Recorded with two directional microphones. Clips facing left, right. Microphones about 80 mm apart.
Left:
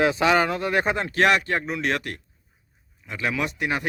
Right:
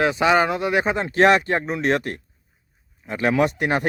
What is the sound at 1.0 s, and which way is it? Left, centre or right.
A man's voice, right.